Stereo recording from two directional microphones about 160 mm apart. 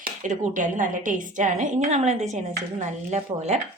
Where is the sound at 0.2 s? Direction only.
50° right (ahead or behind).